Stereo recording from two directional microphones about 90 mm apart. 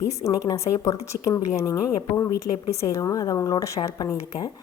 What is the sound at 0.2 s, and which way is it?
A woman's voice, 35° left (ahead or behind).